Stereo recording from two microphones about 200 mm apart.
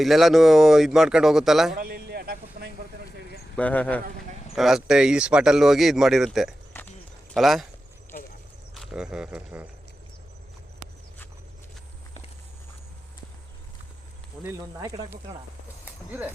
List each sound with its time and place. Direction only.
0.0 s speech: centre (ahead or behind)
1.7 s a sound: 50° right (ahead or behind)
3.5 s speech: 5° left (ahead or behind)
6.8 s clip-clop: 10° left (ahead or behind)
7.3 s speech: centre (ahead or behind)
8.1 s a sound: 45° left (ahead or behind)
8.7 s speech: centre (ahead or behind)
14.4 s speech: 15° right (ahead or behind)